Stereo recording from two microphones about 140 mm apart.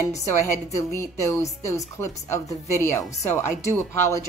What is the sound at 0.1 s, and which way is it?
A woman's voice, 20° left (ahead or behind).